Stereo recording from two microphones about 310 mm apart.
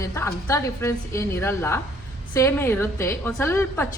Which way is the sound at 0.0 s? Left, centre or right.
Centre.